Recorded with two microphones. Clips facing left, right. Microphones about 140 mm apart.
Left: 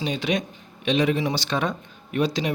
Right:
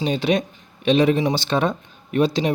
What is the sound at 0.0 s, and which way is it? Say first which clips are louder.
A man's voice: right 5 dB; 30° right (ahead or behind).